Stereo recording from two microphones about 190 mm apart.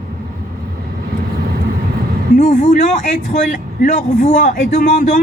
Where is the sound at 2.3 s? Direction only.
40° left (ahead or behind).